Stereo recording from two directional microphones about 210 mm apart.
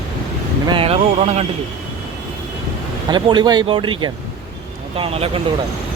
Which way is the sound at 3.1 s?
20° right (ahead or behind).